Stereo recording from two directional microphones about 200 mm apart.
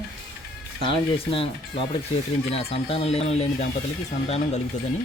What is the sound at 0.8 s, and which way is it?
Speech, 25° left (ahead or behind).